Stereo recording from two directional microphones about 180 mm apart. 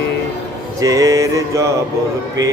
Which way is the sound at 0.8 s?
20° right (ahead or behind).